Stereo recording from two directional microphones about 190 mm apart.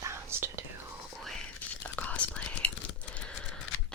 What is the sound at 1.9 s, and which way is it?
Whispering, 10° left (ahead or behind).